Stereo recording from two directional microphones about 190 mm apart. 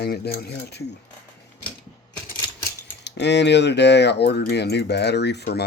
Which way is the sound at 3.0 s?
65° left (ahead or behind).